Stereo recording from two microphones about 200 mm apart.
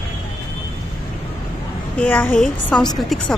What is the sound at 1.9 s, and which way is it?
Speech, 10° left (ahead or behind).